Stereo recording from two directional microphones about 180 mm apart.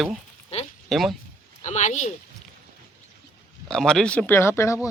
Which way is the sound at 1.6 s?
40° left (ahead or behind).